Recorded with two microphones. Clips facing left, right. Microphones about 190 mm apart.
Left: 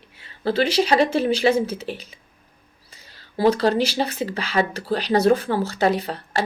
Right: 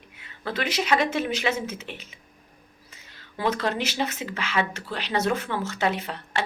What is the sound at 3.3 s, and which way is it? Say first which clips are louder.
Speech: left 8 dB; 35° left (ahead or behind).